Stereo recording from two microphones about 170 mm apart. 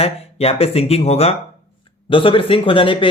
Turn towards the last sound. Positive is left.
turn(degrees=30)  # may be behind; listen again after turning